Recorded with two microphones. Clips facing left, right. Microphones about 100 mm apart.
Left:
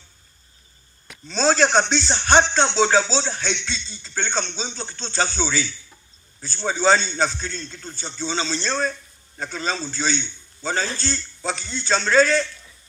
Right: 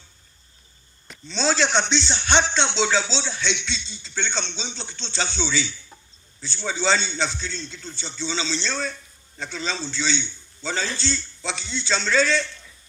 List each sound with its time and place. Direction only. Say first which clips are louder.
1.2 s a man's voice: left 4 dB; 45° left (ahead or behind)